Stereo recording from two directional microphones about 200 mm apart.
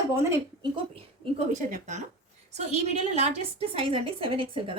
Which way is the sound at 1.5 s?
40° right (ahead or behind).